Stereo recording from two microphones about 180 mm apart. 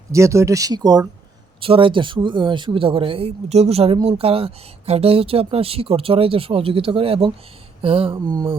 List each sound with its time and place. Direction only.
0.1 s speech: 15° right (ahead or behind)
8.1 s speech: 20° right (ahead or behind)